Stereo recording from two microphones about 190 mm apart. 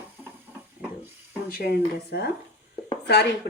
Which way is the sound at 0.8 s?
10° right (ahead or behind).